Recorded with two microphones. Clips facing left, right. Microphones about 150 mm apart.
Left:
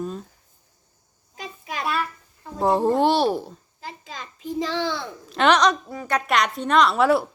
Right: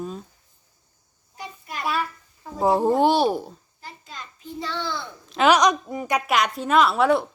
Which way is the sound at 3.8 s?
90° left.